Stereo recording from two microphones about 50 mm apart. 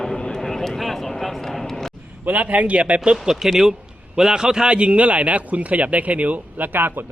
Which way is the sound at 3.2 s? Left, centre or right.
Centre.